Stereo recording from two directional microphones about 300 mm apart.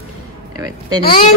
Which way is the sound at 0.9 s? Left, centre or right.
Centre.